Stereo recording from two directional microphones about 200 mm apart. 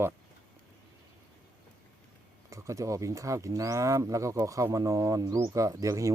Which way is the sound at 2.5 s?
15° right (ahead or behind).